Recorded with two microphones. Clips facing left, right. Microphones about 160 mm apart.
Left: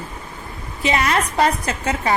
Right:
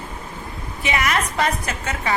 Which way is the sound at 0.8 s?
30° left (ahead or behind).